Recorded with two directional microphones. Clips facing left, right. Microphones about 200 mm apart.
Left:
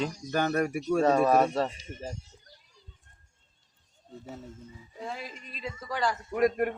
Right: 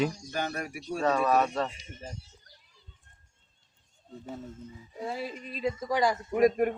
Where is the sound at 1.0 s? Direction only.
30° left (ahead or behind).